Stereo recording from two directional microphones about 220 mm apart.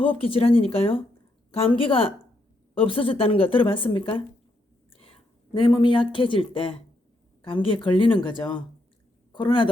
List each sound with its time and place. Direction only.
0.0 s a woman's voice: 25° left (ahead or behind)
5.5 s a woman's voice: 20° left (ahead or behind)